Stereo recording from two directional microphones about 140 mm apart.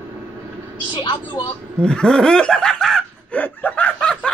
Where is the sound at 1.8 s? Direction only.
5° left (ahead or behind).